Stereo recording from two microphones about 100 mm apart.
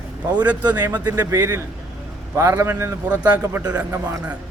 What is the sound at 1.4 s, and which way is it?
A man's voice, 25° right (ahead or behind).